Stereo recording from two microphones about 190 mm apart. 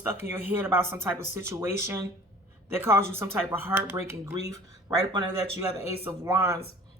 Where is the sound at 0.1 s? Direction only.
10° right (ahead or behind).